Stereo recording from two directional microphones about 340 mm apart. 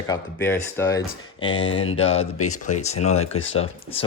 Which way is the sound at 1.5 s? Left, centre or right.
Left.